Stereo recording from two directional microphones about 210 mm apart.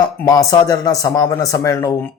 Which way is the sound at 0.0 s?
15° left (ahead or behind).